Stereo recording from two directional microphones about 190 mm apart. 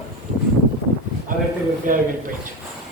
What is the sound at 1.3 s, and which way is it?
Speech, 45° right (ahead or behind).